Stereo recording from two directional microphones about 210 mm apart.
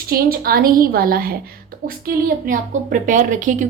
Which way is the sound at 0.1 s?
45° right (ahead or behind).